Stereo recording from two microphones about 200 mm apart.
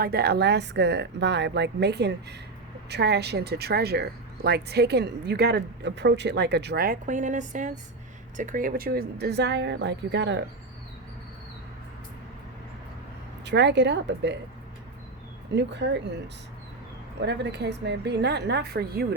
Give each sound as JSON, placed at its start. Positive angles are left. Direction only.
{"t": 0.0, "sound": "speech", "side_deg": -50}
{"t": 13.4, "sound": "speech", "side_deg": -60}
{"t": 15.5, "sound": "speech", "side_deg": -60}
{"t": 17.2, "sound": "speech", "side_deg": -60}